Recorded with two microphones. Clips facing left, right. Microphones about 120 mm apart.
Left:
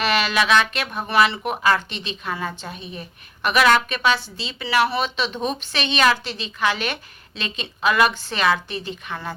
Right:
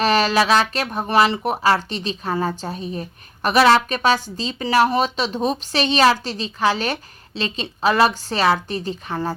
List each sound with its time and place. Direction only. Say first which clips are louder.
0.0 s speech: right 4 dB; 40° right (ahead or behind)